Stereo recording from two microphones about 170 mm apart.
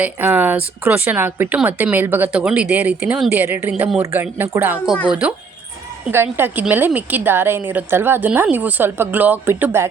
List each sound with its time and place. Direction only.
0.0 s speech: 10° right (ahead or behind)